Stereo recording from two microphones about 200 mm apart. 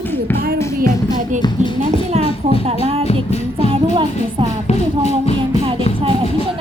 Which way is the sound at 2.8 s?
30° right (ahead or behind).